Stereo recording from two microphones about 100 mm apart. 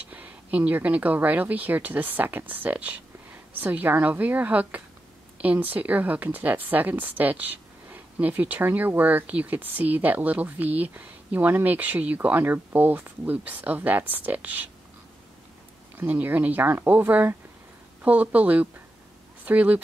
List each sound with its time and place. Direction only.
0.1 s a woman's voice: 15° right (ahead or behind)
16.0 s a woman's voice: 20° right (ahead or behind)